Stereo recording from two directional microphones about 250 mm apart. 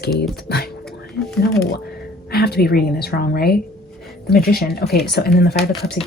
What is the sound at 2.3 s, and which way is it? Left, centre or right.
Speech, left.